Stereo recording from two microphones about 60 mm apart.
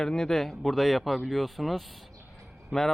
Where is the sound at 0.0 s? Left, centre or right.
Centre.